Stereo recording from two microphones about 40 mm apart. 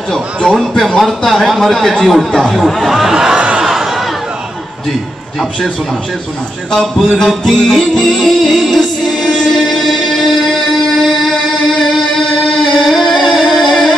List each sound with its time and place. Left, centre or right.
0.5 s a man's voice: centre
3.5 s a sound: centre
7.2 s music: centre
8.0 s a man's voice: centre
8.6 s music: centre
9.3 s music: centre
9.6 s music: centre